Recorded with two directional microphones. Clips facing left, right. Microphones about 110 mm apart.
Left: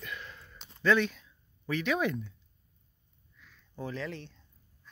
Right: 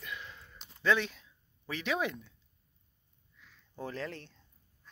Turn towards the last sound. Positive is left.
turn(degrees=-45)  # may be behind; listen again after turning